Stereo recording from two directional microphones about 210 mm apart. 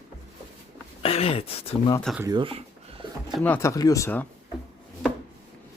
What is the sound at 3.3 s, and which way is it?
Speech, 10° left (ahead or behind).